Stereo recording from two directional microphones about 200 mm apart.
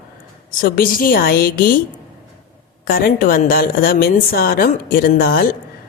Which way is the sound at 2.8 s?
50° left (ahead or behind).